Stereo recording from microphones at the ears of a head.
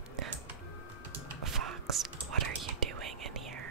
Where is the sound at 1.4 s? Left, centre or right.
Right.